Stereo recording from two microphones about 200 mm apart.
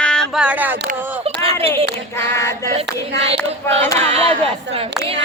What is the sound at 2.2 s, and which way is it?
Female singing, 15° left (ahead or behind).